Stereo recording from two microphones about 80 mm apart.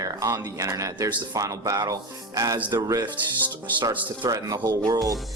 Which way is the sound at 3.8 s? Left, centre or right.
Right.